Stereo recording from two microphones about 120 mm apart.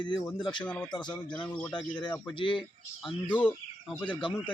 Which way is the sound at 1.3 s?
10° left (ahead or behind).